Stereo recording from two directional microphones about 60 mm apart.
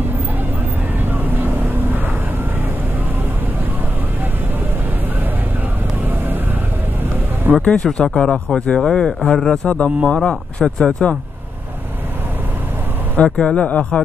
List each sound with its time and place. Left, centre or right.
6.0 s vehicle: right
7.5 s a sound: right
7.8 s speech: centre
8.7 s speech: centre
13.1 s speech: centre